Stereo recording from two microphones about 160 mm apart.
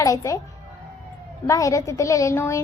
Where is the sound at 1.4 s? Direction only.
20° left (ahead or behind).